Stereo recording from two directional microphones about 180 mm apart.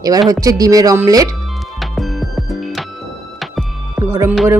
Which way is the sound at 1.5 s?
Centre (ahead or behind).